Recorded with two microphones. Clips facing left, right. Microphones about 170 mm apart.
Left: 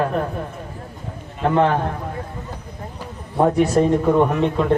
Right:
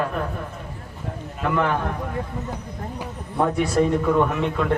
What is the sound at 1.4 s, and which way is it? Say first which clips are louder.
Speech: left 5 dB; 35° left (ahead or behind).